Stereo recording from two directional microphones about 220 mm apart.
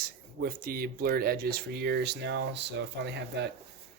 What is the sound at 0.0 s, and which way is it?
Speech, 40° right (ahead or behind).